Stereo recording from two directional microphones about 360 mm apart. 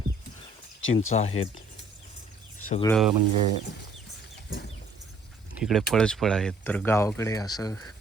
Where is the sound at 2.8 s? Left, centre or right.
Centre.